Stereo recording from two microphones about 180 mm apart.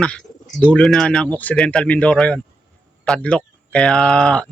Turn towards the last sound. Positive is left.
turn(degrees=5)  # may be behind; listen again after turning